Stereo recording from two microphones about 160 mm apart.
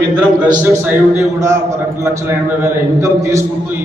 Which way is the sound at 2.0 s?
15° right (ahead or behind).